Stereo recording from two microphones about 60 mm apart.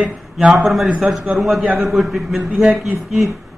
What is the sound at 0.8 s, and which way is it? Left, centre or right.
Speech, centre.